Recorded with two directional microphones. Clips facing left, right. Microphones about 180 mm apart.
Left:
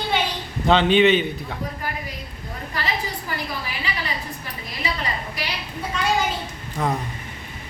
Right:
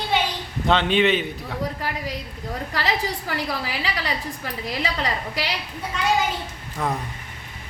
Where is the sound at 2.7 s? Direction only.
90° right.